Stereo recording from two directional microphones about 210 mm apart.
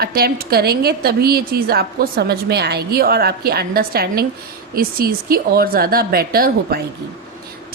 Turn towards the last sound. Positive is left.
turn(degrees=-45)  # may be behind; listen again after turning